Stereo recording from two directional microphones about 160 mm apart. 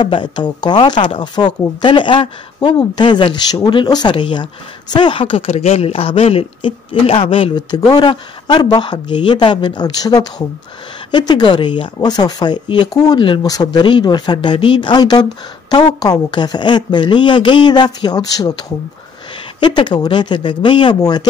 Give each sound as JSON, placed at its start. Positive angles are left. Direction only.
{"t": 0.0, "sound": "speech", "side_deg": 30}